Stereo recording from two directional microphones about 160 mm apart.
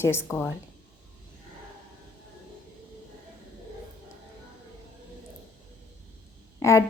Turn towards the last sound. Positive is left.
turn(degrees=20)  # may be behind; listen again after turning